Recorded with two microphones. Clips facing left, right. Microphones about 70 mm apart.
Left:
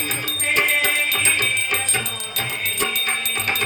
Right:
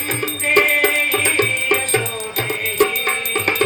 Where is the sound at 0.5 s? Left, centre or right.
Right.